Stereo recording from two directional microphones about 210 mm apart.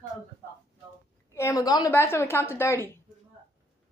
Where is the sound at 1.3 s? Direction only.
15° left (ahead or behind).